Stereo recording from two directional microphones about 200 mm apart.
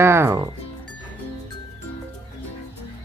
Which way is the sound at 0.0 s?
15° right (ahead or behind).